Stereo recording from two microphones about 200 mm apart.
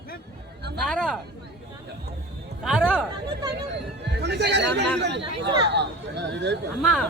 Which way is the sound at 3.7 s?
60° right (ahead or behind).